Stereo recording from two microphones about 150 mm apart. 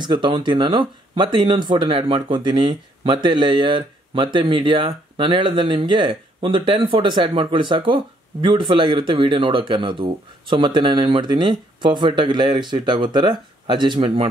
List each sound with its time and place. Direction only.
0.0 s speech: 30° right (ahead or behind)